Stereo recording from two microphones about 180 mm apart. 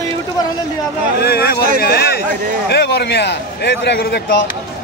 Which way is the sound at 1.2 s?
60° left (ahead or behind).